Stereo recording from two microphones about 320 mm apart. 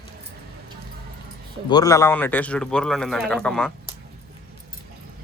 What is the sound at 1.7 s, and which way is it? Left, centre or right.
A man's voice, centre.